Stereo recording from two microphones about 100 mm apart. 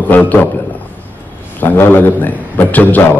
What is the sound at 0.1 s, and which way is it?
Speech, 15° left (ahead or behind).